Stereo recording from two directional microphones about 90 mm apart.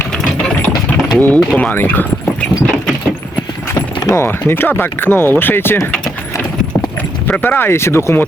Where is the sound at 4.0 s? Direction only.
35° left (ahead or behind).